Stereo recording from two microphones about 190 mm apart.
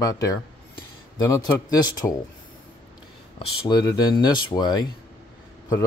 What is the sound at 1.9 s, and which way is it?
Speech, 20° left (ahead or behind).